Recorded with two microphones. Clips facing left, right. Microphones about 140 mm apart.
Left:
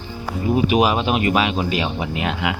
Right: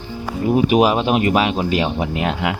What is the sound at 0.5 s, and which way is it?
Speech, 40° right (ahead or behind).